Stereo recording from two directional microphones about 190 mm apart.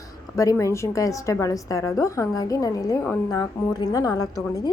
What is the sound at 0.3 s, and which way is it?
A woman's voice, 15° left (ahead or behind).